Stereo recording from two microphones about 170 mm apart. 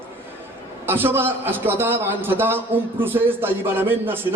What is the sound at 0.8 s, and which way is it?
Speech, 10° right (ahead or behind).